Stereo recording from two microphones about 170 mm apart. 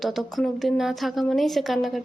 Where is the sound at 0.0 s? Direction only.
Centre (ahead or behind).